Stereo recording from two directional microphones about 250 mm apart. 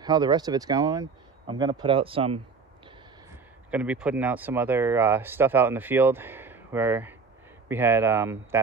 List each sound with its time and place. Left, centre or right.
0.0 s speech: centre
3.7 s speech: centre